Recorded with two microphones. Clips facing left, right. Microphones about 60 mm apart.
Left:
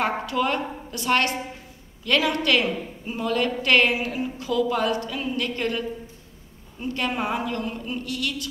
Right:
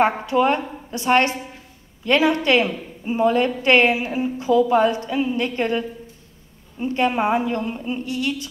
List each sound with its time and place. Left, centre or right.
0.0 s a woman's voice: right